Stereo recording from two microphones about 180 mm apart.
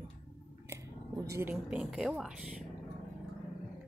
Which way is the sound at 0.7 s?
15° right (ahead or behind).